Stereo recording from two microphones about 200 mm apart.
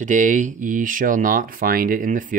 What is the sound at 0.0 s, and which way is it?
Speech, 40° right (ahead or behind).